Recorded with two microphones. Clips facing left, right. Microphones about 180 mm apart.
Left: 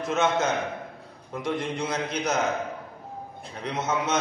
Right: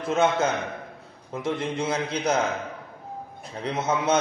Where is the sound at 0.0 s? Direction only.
30° right (ahead or behind).